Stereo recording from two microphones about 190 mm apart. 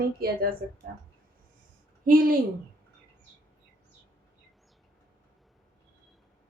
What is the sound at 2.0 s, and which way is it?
Speech, 50° right (ahead or behind).